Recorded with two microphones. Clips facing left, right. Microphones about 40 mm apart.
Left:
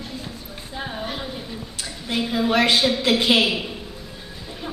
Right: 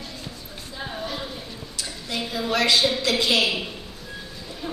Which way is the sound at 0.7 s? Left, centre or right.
Left.